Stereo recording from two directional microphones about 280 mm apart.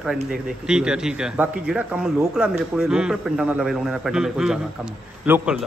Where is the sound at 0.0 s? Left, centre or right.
Centre.